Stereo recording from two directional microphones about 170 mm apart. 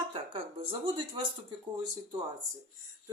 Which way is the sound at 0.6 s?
30° right (ahead or behind).